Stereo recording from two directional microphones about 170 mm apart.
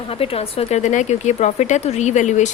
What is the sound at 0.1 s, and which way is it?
Speech, 35° left (ahead or behind).